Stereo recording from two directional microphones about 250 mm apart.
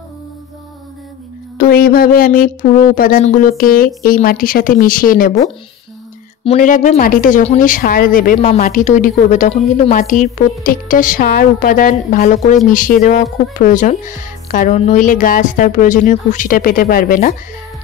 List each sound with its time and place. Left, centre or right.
1.6 s speech: left